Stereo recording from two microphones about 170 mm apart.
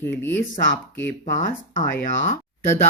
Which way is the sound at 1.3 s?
50° left (ahead or behind).